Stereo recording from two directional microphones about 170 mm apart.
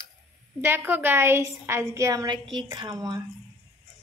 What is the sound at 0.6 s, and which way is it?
A woman's voice, 15° right (ahead or behind).